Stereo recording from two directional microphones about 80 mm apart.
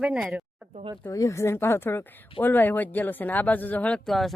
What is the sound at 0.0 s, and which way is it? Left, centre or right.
Speech, centre.